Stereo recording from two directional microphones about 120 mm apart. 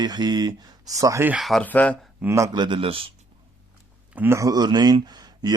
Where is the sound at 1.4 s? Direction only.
Centre (ahead or behind).